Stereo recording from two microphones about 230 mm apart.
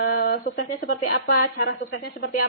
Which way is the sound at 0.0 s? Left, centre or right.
Left.